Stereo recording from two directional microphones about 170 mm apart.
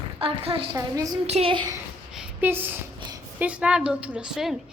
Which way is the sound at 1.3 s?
35° right (ahead or behind).